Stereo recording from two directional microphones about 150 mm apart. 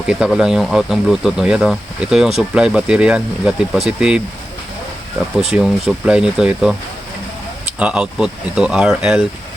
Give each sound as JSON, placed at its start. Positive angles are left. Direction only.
{"t": 0.1, "sound": "speech", "side_deg": -5}
{"t": 5.5, "sound": "speech", "side_deg": -5}